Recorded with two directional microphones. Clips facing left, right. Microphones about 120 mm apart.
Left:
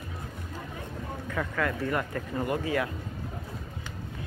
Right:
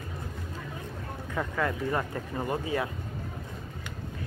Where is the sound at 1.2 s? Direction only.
15° right (ahead or behind).